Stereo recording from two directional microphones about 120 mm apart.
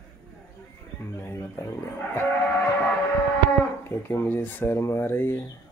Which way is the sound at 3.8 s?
20° left (ahead or behind).